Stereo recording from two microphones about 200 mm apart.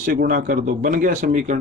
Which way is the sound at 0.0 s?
45° right (ahead or behind).